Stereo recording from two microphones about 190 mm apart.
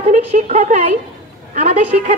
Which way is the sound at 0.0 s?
35° right (ahead or behind).